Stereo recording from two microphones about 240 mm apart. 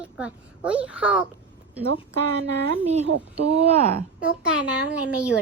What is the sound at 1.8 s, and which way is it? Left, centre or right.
Speech, right.